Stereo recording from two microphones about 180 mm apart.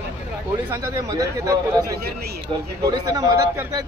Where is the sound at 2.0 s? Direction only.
60° right (ahead or behind).